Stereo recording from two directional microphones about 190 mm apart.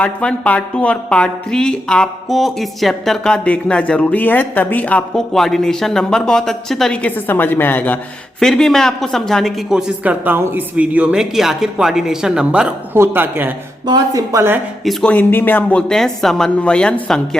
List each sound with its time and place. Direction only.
0.0 s a woman's voice: 5° left (ahead or behind); by 14.6 s 15° right (ahead or behind)
14.8 s speech: 5° left (ahead or behind)